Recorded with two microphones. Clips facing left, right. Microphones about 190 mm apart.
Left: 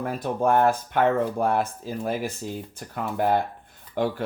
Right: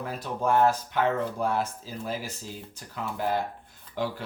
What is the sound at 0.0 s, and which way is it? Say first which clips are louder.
Speech: left 5 dB; 50° left (ahead or behind).